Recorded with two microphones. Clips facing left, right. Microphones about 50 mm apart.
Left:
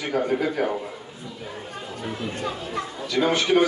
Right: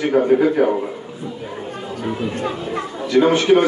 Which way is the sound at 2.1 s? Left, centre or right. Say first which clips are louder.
Right 5 dB; right.